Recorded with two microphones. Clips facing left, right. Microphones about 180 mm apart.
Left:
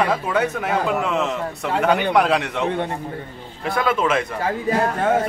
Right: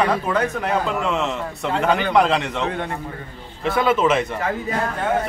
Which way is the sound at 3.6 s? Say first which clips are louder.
Right 2 dB; centre (ahead or behind).